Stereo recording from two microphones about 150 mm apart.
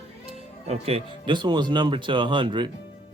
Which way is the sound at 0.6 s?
45° right (ahead or behind).